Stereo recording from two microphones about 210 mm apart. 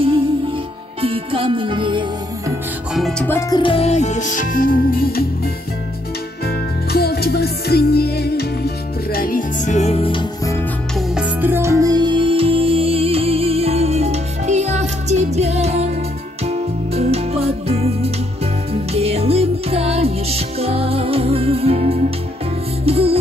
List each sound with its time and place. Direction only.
1.0 s music: 25° right (ahead or behind)
2.9 s music: centre (ahead or behind); by 5.2 s 45° left (ahead or behind)
6.4 s music: 50° left (ahead or behind); by 10.5 s 25° left (ahead or behind)
11.0 s music: 5° right (ahead or behind); by 23.1 s 30° right (ahead or behind)